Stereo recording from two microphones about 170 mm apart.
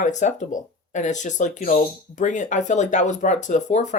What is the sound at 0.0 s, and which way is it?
Speech, 45° left (ahead or behind).